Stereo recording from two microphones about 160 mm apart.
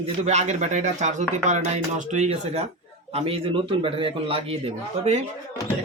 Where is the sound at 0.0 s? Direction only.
45° right (ahead or behind).